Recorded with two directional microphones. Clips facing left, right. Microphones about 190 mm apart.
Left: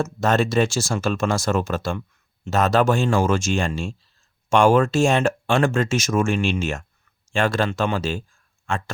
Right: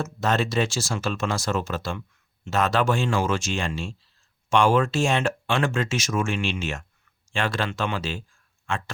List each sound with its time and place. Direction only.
0.0 s speech: 50° left (ahead or behind)